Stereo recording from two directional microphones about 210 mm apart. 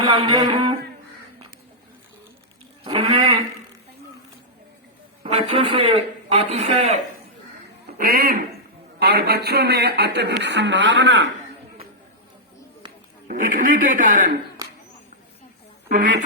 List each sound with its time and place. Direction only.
0.0 s a man's voice: 25° right (ahead or behind)
2.8 s a man's voice: 25° right (ahead or behind)
5.2 s a man's voice: 25° right (ahead or behind)
7.9 s a man's voice: 45° right (ahead or behind)
13.2 s a man's voice: 40° right (ahead or behind)
15.9 s a man's voice: 40° right (ahead or behind)